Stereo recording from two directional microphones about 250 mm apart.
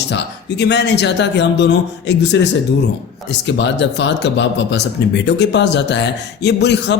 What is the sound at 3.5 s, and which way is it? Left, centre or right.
A man's voice, left.